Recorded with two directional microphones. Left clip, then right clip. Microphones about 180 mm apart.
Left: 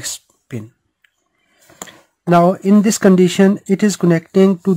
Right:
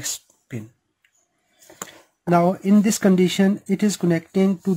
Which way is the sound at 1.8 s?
30° left (ahead or behind).